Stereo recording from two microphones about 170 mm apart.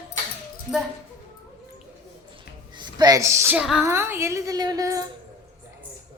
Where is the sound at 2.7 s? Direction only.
25° right (ahead or behind).